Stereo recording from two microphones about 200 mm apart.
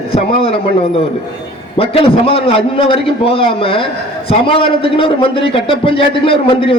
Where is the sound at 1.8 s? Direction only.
30° left (ahead or behind).